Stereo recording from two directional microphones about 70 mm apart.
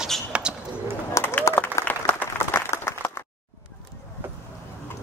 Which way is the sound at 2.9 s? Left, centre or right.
Left.